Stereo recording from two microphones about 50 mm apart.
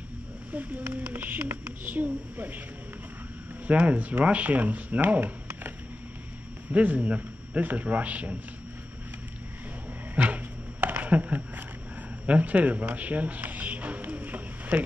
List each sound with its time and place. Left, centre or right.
0.5 s speech: right
3.6 s speech: right
6.7 s a man's voice: right
10.1 s a sound: right
12.3 s music: right